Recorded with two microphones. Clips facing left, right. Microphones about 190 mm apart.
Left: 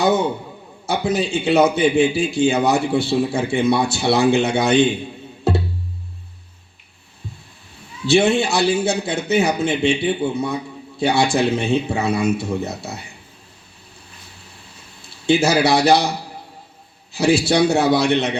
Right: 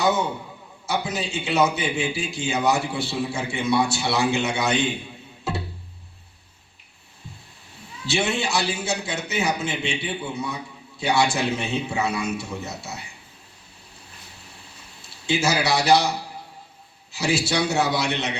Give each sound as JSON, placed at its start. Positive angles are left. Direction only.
{"t": 0.9, "sound": "a man's voice", "side_deg": 55}
{"t": 8.0, "sound": "a man's voice", "side_deg": 55}
{"t": 15.3, "sound": "a man's voice", "side_deg": 55}
{"t": 17.1, "sound": "a man's voice", "side_deg": 55}